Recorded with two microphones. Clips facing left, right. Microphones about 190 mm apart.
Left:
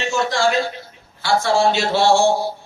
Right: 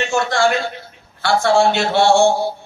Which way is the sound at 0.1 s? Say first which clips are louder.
Right 2 dB; 60° right (ahead or behind).